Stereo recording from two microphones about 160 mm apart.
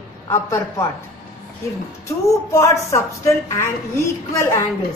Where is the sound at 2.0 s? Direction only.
20° left (ahead or behind).